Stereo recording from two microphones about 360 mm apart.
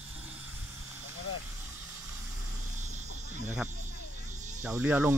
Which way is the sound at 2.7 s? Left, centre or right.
Centre.